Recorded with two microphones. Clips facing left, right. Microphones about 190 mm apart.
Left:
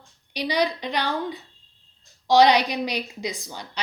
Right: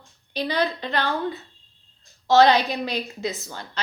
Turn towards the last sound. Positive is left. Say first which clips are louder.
# right 1 dB
turn(degrees=15)  # may be behind; listen again after turning